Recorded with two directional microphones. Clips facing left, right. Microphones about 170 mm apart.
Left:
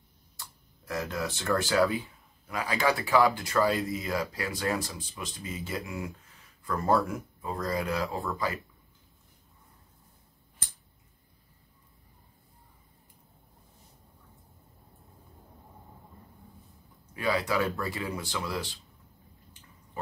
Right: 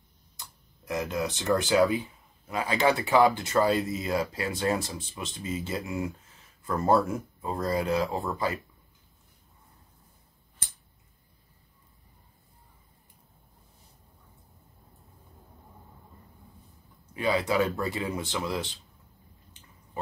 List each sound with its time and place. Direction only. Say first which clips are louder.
0.4 s speech: even; 20° right (ahead or behind)
17.1 s speech: right 2 dB; 25° right (ahead or behind)